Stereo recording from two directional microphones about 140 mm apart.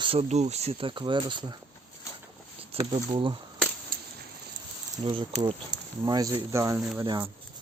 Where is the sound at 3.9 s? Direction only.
90° right.